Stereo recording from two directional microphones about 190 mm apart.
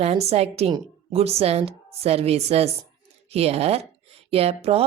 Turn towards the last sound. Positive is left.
turn(degrees=-30)  # may be behind; listen again after turning